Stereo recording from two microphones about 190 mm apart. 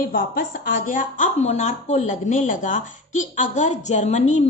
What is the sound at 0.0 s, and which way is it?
Speech, 50° left (ahead or behind).